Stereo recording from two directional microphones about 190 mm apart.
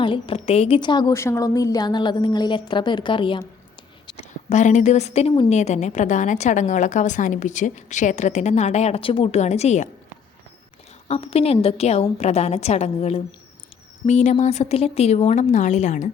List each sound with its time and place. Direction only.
0.0 s a woman's voice: 25° left (ahead or behind)
11.1 s a woman's voice: 30° left (ahead or behind)